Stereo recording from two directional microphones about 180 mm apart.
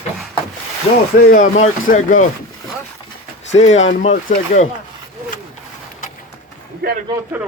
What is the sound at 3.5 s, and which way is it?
Speech, 40° left (ahead or behind).